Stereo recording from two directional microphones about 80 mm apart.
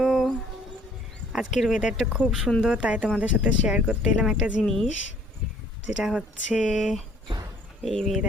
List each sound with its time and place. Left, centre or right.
0.0 s a sound: centre
1.3 s speech: centre
4.6 s speech: centre
6.0 s speech: centre
7.3 s basketball bounce: right
7.8 s speech: centre